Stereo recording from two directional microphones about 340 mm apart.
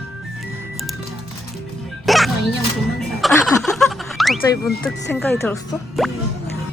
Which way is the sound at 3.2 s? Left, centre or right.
Centre.